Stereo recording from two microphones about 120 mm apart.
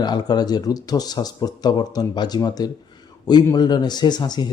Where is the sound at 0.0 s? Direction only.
35° left (ahead or behind).